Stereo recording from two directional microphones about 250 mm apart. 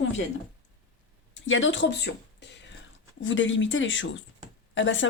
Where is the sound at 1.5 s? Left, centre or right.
Left.